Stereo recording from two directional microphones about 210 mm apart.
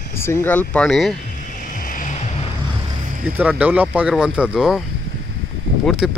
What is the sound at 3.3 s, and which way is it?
Speech, 5° right (ahead or behind).